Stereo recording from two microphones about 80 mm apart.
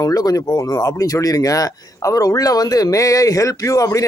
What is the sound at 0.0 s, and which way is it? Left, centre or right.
A man's voice, left.